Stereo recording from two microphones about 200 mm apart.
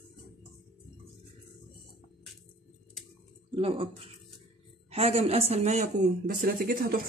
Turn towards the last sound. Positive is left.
turn(degrees=-45)  # may be behind; listen again after turning